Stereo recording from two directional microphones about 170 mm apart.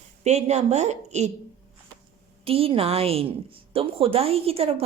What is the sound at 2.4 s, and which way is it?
Speech, 35° right (ahead or behind).